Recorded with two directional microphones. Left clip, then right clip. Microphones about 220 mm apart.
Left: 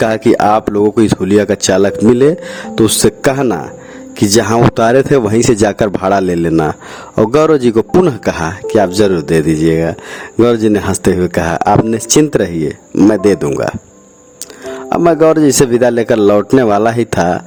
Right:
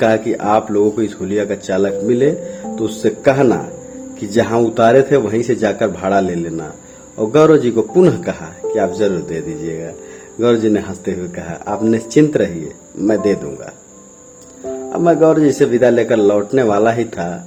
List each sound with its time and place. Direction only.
0.0 s speech: 50° left (ahead or behind)
14.8 s speech: 55° left (ahead or behind)